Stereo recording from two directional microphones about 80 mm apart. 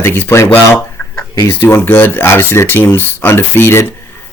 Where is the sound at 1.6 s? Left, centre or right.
Left.